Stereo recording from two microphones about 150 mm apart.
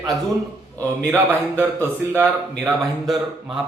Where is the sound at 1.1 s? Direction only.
15° right (ahead or behind).